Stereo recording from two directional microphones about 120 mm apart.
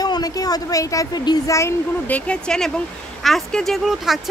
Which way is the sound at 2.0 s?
10° left (ahead or behind).